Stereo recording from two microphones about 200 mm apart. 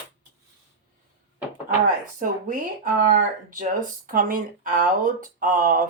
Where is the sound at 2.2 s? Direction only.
40° right (ahead or behind).